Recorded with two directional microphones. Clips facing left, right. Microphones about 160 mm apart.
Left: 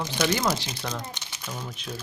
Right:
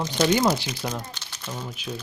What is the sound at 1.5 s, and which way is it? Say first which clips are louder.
Speech: right 3 dB; 5° right (ahead or behind).